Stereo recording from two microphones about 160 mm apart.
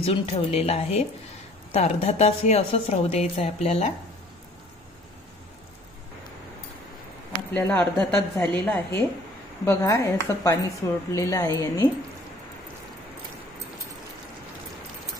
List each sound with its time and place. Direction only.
0.0 s a woman's voice: 35° left (ahead or behind)
7.5 s a woman's voice: 10° left (ahead or behind)